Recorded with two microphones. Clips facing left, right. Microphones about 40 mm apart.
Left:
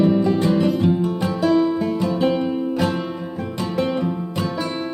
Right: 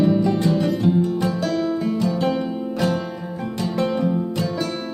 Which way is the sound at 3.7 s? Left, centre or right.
Centre.